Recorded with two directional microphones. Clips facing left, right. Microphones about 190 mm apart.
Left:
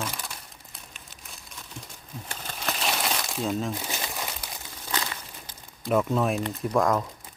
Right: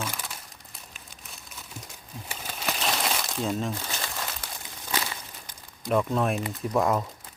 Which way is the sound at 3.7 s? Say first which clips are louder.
Left 1 dB; 15° left (ahead or behind).